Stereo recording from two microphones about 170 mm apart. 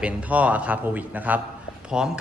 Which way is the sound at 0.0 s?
10° right (ahead or behind).